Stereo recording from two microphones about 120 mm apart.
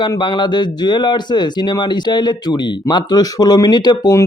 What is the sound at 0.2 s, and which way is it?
A man's voice, 40° left (ahead or behind).